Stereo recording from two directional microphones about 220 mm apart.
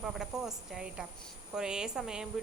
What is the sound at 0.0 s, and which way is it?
A woman's voice, centre (ahead or behind).